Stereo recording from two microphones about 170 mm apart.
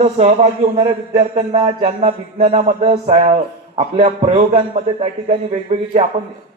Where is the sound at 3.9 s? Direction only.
35° right (ahead or behind).